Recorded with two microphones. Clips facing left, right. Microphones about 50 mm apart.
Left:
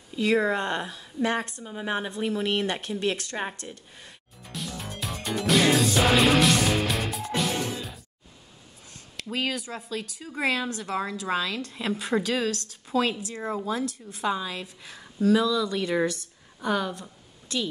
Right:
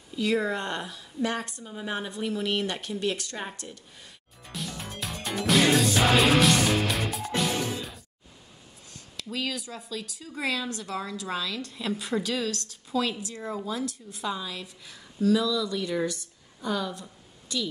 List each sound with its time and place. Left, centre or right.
0.1 s a woman's voice: left
4.4 s music: centre
9.1 s a woman's voice: left